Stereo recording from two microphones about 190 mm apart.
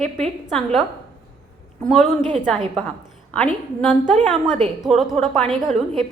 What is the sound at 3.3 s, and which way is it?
Speech, 5° left (ahead or behind).